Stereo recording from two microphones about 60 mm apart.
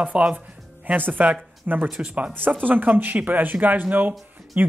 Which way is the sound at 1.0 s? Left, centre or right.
Right.